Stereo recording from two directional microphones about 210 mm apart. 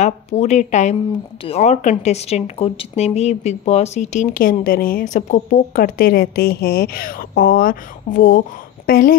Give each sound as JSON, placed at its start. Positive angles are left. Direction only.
{"t": 0.0, "sound": "speech", "side_deg": 30}